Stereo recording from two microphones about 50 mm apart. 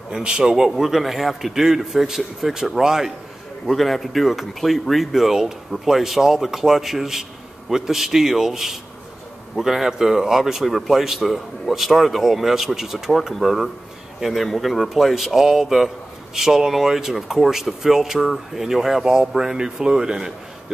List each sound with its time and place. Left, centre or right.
0.2 s speech: centre
3.6 s speech: centre